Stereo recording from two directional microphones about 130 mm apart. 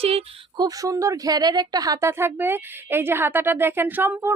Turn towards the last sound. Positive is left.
turn(degrees=-15)  # may be behind; listen again after turning